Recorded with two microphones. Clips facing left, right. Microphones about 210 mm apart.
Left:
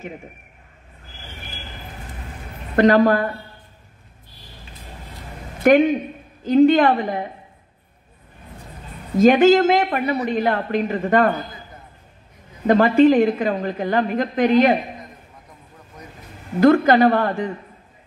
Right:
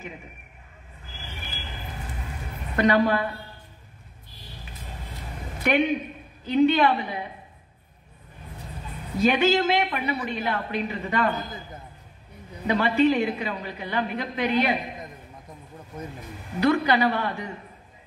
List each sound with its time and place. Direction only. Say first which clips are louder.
2.7 s a woman's voice: left 6 dB; 50° left (ahead or behind)
5.6 s a woman's voice: left 8 dB; 50° left (ahead or behind)
9.2 s a woman's voice: left 8 dB; 50° left (ahead or behind)
12.6 s a woman's voice: left 7 dB; 50° left (ahead or behind)
16.5 s a woman's voice: left 8 dB; 50° left (ahead or behind)